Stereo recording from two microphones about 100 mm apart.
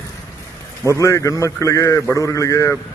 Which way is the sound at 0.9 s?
30° left (ahead or behind).